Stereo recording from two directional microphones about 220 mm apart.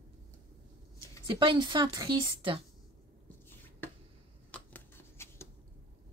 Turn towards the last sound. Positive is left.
turn(degrees=10)  # may be behind; listen again after turning